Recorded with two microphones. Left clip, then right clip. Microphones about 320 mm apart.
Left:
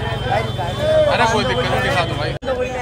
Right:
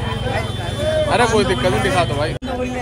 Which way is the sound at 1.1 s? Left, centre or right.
Centre.